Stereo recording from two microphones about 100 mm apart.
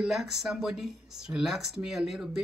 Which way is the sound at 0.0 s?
5° right (ahead or behind).